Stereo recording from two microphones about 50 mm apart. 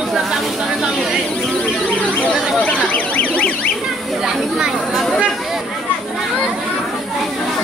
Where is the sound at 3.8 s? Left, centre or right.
Centre.